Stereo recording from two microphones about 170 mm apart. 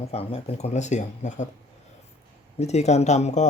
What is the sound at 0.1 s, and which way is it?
A man's voice, 35° left (ahead or behind).